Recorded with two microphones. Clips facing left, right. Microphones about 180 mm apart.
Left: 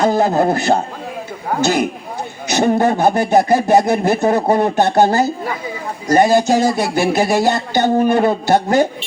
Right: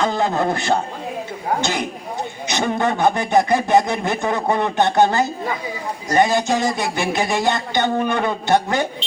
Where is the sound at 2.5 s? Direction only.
40° left (ahead or behind).